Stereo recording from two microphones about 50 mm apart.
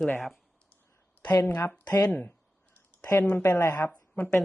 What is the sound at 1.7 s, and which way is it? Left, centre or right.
Speech, left.